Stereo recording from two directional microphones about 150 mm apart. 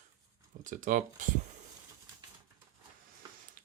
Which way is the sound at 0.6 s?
60° right (ahead or behind).